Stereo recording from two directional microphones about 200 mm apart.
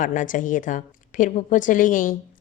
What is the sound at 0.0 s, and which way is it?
A woman's voice, 40° left (ahead or behind).